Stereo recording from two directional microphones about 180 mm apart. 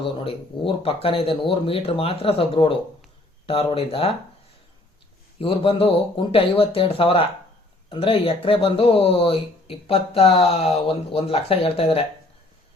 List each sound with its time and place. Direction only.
0.0 s speech: 30° left (ahead or behind)
5.4 s speech: 30° left (ahead or behind)